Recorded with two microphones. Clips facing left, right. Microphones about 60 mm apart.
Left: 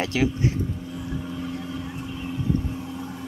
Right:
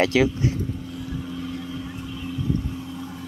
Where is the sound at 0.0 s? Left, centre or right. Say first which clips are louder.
Right 4 dB; right.